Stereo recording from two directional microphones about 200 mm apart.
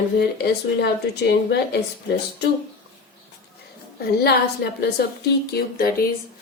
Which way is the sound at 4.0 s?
55° left (ahead or behind).